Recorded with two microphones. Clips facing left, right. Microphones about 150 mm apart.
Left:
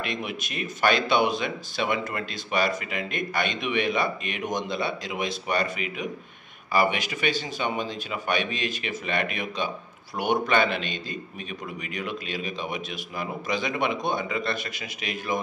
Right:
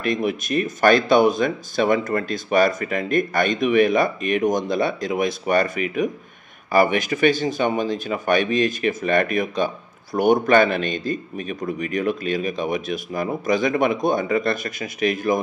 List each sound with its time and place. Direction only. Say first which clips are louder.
0.0 s speech: right 9 dB; 45° right (ahead or behind)